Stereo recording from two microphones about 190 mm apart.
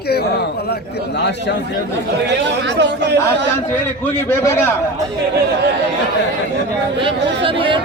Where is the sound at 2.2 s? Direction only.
65° right (ahead or behind).